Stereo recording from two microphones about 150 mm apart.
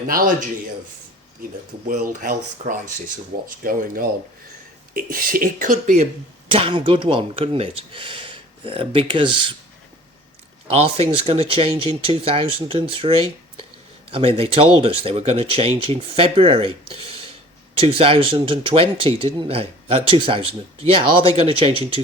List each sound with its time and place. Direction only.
0.1 s speech: 70° right (ahead or behind)
1.9 s speech: 60° right (ahead or behind)
6.5 s speech: 35° right (ahead or behind)
10.7 s speech: 40° right (ahead or behind)